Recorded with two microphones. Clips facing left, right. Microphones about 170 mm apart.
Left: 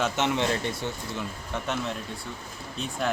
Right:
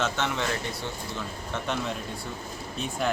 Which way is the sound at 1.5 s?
5° left (ahead or behind).